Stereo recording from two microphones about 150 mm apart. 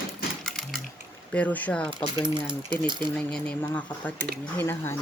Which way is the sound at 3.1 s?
10° left (ahead or behind).